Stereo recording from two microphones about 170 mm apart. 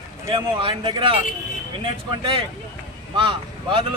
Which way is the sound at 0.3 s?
30° right (ahead or behind).